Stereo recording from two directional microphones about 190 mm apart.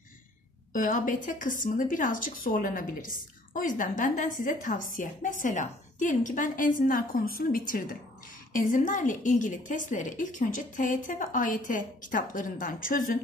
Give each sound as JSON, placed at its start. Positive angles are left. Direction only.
{"t": 0.7, "sound": "a woman's voice", "side_deg": 45}